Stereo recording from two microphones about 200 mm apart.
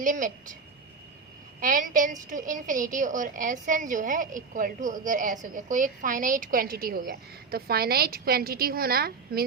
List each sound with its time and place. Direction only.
0.0 s a woman's voice: 40° right (ahead or behind)
1.6 s a woman's voice: 40° right (ahead or behind)